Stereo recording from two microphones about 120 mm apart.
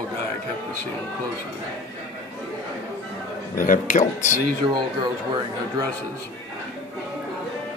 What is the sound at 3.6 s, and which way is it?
Speech, 90° left.